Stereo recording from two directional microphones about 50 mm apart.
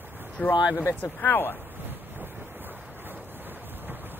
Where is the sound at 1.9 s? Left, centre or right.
Right.